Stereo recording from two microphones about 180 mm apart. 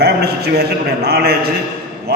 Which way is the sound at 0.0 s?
65° right (ahead or behind).